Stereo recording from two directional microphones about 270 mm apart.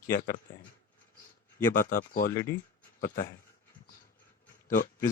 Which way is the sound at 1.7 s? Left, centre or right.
Left.